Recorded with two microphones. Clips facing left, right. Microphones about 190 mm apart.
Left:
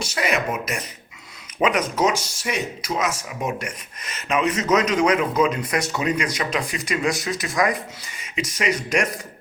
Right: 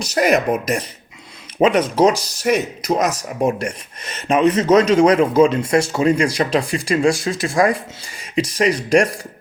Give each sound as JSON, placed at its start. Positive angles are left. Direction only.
{"t": 0.0, "sound": "speech", "side_deg": -40}